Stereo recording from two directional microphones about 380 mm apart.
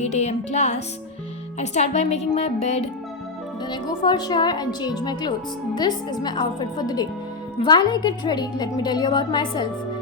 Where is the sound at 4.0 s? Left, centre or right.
Centre.